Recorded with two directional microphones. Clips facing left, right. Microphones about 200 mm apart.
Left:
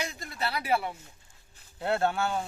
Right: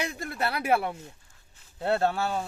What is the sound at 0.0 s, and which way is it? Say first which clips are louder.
Speech: right 4 dB; 55° right (ahead or behind).